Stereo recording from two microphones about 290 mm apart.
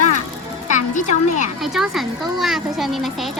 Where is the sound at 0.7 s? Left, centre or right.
Left.